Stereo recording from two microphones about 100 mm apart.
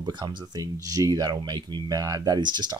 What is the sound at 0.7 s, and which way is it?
Speech, 35° right (ahead or behind).